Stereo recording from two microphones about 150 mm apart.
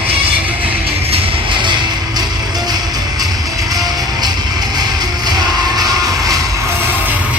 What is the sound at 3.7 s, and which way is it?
Music, 25° right (ahead or behind).